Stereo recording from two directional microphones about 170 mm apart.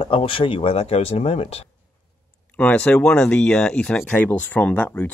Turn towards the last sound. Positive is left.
turn(degrees=5)  # may be behind; listen again after turning